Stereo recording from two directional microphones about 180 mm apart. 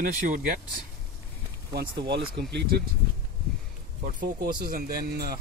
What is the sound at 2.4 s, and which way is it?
Speech, 65° right (ahead or behind).